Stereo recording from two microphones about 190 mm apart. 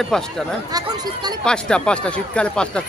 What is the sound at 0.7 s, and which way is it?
Speech, 20° right (ahead or behind).